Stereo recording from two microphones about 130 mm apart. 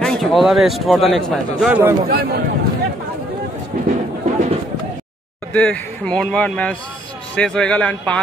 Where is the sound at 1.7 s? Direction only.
15° right (ahead or behind).